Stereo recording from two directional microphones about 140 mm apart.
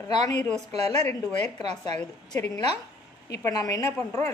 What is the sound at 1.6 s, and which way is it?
Speech, 50° right (ahead or behind).